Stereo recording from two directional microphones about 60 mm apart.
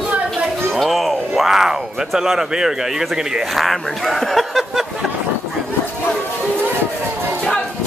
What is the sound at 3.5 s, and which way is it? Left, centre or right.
Speech, centre.